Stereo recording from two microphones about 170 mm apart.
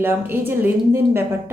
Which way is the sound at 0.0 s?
10° right (ahead or behind).